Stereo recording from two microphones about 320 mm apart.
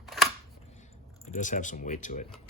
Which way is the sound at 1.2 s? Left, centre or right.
Left.